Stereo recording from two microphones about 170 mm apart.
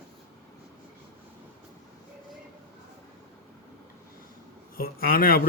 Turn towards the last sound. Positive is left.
turn(degrees=60)  # may be behind; listen again after turning